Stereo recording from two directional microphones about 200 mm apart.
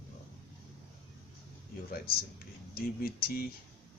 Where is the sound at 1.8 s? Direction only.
50° left (ahead or behind).